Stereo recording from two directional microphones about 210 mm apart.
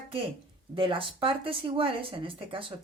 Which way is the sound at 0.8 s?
25° right (ahead or behind).